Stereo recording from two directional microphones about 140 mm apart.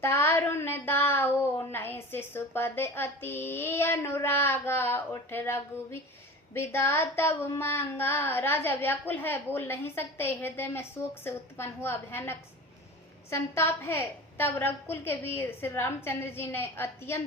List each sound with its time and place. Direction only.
0.0 s a woman's voice: 15° left (ahead or behind)